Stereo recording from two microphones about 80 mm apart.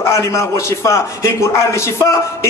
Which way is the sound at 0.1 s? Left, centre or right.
Left.